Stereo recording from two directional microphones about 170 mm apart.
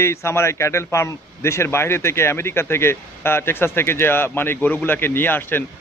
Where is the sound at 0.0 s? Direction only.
15° left (ahead or behind).